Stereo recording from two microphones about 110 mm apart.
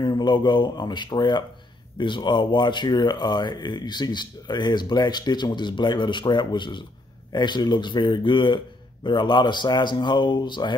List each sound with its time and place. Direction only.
0.0 s speech: 40° left (ahead or behind)